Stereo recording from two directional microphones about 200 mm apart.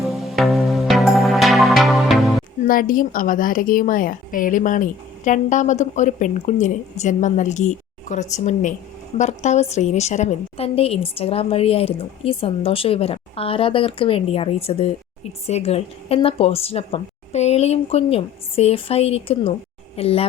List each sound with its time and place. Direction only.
0.0 s music: centre (ahead or behind)
2.6 s a woman's voice: 45° left (ahead or behind)